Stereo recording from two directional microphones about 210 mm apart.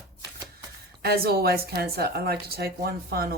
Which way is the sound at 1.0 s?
45° right (ahead or behind).